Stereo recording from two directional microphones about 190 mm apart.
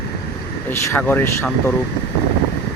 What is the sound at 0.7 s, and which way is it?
Speech, 10° left (ahead or behind).